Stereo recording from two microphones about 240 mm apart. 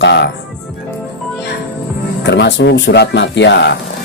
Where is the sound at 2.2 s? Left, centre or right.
Left.